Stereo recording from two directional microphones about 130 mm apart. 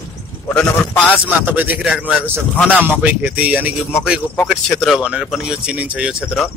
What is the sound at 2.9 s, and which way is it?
Speech, 10° right (ahead or behind).